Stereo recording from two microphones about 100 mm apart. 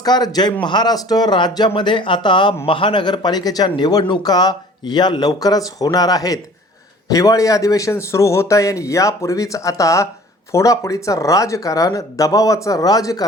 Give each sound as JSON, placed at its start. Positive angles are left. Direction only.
{"t": 0.0, "sound": "speech", "side_deg": 40}